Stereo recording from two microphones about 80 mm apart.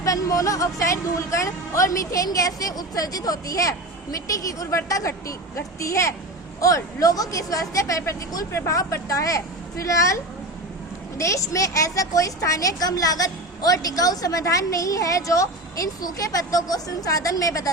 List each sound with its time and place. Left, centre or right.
0.0 s a woman's voice: left
11.2 s a woman's voice: left